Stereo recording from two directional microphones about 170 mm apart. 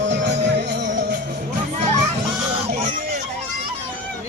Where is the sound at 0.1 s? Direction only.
90° right.